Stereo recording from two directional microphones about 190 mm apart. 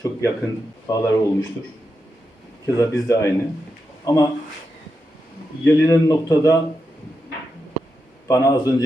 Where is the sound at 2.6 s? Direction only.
15° left (ahead or behind).